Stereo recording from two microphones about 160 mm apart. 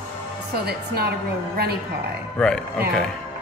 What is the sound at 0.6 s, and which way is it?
Speech, 85° right.